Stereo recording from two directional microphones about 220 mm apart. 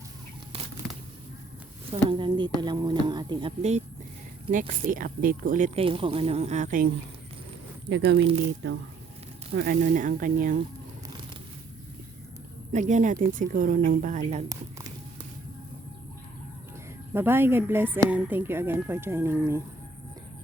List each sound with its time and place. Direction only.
0.8 s a sound: centre (ahead or behind)
1.9 s a woman's voice: 20° right (ahead or behind); by 6.9 s 40° right (ahead or behind)
7.9 s speech: 55° right (ahead or behind)
9.6 s speech: 40° right (ahead or behind)
12.7 s speech: 35° right (ahead or behind)
14.5 s speech: 15° right (ahead or behind)
17.2 s speech: 10° right (ahead or behind)